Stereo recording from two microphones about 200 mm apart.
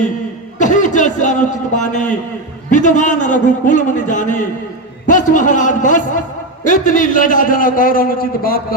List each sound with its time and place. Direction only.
0.6 s a man's voice: 40° left (ahead or behind)